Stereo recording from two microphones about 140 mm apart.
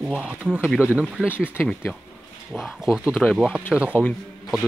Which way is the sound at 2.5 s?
Centre (ahead or behind).